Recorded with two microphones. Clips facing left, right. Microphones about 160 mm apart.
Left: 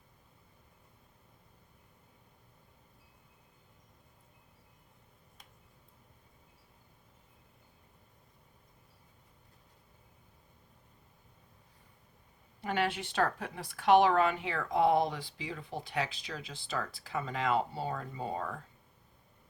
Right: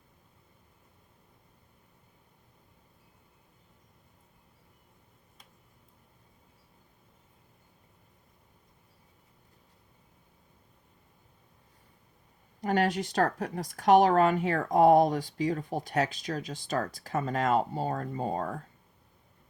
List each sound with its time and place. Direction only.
12.6 s speech: 40° right (ahead or behind)